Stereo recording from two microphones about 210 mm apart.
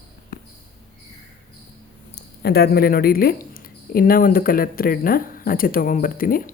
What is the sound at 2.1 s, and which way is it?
Speech, 50° left (ahead or behind).